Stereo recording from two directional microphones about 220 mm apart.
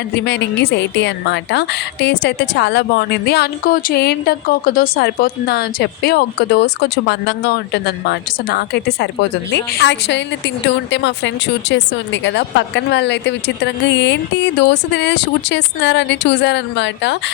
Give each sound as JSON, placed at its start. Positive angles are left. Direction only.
{"t": 0.1, "sound": "a woman's voice", "side_deg": 50}